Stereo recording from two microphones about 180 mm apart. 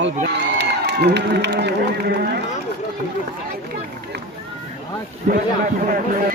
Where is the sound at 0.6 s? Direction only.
70° right (ahead or behind).